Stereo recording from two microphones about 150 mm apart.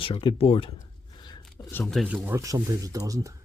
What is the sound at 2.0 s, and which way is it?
Speech, 10° right (ahead or behind).